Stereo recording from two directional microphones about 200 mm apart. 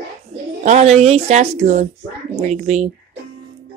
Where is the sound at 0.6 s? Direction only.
35° right (ahead or behind).